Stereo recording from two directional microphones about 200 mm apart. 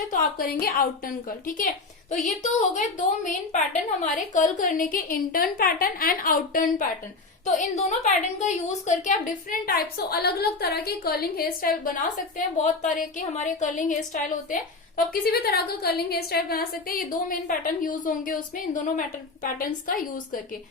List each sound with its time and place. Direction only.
0.1 s a woman's voice: 45° left (ahead or behind)
4.0 s a woman's voice: 40° left (ahead or behind)